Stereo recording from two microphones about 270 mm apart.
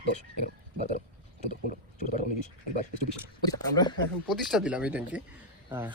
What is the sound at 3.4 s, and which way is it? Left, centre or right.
Speech, centre.